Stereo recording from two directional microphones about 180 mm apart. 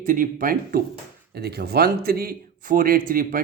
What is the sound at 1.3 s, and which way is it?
A man's voice, 60° right (ahead or behind).